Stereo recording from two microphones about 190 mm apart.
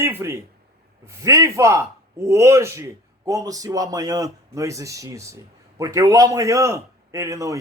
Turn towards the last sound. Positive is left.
turn(degrees=-15)  # may be behind; listen again after turning